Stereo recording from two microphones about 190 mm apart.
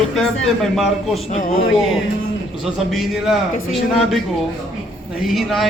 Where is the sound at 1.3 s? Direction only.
45° left (ahead or behind).